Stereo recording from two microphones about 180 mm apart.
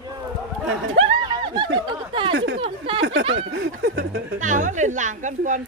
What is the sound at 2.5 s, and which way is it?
Speech, 30° right (ahead or behind).